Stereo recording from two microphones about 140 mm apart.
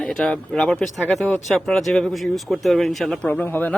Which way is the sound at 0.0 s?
5° left (ahead or behind).